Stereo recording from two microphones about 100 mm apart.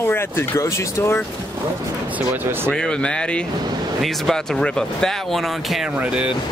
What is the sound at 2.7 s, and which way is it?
Speech, 10° left (ahead or behind).